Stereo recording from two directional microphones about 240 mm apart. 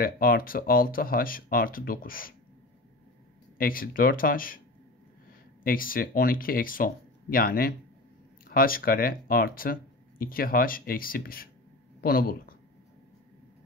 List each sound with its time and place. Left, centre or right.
0.0 s speech: left
3.5 s speech: left
5.6 s speech: left